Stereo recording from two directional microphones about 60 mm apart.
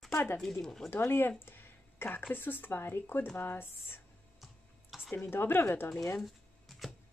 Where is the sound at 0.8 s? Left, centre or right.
Left.